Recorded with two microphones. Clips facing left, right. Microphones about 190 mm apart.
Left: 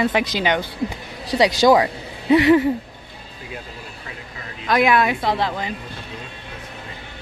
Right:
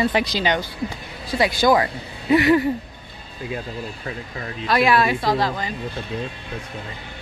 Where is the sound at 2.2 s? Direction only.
20° left (ahead or behind).